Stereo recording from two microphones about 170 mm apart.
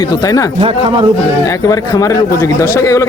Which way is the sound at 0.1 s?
20° left (ahead or behind).